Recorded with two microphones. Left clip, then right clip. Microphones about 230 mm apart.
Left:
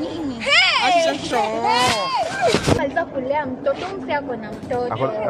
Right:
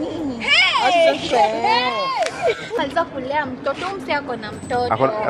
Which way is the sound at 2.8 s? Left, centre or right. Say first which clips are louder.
Right 1 dB; right.